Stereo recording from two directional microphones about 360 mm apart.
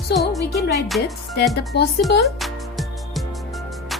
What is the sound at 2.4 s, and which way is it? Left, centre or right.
Music, centre.